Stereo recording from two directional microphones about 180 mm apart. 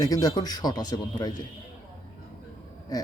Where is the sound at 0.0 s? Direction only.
20° left (ahead or behind).